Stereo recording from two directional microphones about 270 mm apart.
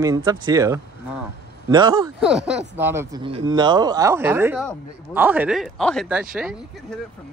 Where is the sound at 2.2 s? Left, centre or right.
Centre.